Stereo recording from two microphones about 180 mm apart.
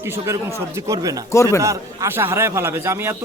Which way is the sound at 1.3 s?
15° left (ahead or behind).